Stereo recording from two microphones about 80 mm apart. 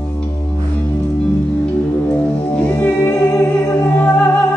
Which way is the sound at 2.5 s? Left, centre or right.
Centre.